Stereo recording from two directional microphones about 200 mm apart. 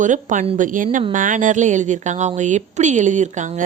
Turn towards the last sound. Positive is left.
turn(degrees=-35)  # may be behind; listen again after turning